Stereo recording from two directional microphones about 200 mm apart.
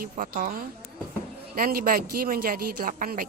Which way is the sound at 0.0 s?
45° right (ahead or behind).